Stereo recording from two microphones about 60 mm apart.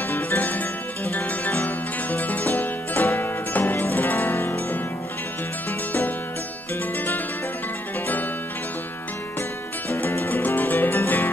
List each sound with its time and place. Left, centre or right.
0.1 s music: left
5.7 s music: left
9.8 s music: left